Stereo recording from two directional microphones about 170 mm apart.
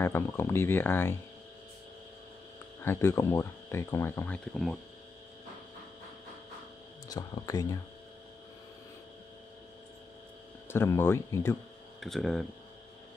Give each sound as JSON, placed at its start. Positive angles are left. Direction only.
{"t": 0.0, "sound": "speech", "side_deg": 15}
{"t": 2.8, "sound": "speech", "side_deg": 15}
{"t": 7.1, "sound": "speech", "side_deg": 20}
{"t": 10.7, "sound": "speech", "side_deg": 15}
{"t": 12.0, "sound": "speech", "side_deg": 0}